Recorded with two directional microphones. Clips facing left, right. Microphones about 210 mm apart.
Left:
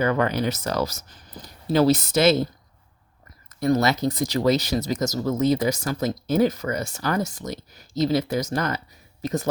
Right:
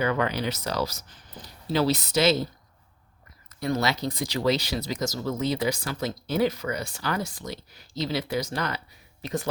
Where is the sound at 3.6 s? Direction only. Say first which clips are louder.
Left 6 dB; 45° left (ahead or behind).